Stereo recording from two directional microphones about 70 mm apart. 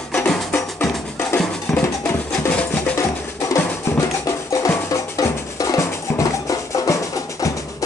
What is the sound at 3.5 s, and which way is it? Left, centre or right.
Music, left.